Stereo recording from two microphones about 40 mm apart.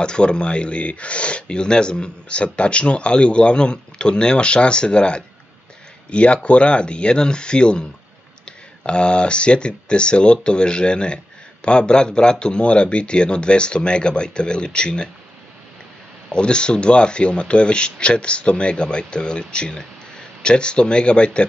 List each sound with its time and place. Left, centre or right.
0.0 s speech: left
16.3 s speech: left